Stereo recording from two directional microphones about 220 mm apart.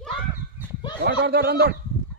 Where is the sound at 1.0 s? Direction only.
45° right (ahead or behind).